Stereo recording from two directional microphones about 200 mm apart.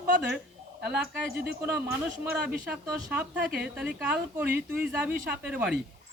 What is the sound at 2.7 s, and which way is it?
Speech, 5° right (ahead or behind).